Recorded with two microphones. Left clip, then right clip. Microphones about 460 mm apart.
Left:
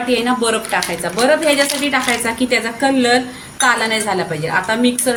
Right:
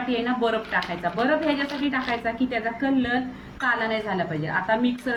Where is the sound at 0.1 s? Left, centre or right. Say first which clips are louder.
Left 8 dB; centre.